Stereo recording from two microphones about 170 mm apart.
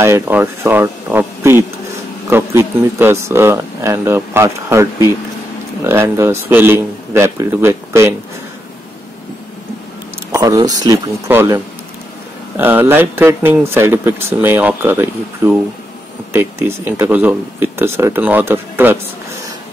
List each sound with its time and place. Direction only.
0.0 s speech: 15° right (ahead or behind)
5.9 s speech: 15° right (ahead or behind)
10.3 s speech: 20° right (ahead or behind)